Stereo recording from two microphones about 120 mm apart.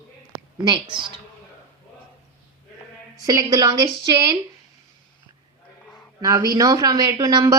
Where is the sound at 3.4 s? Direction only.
30° right (ahead or behind).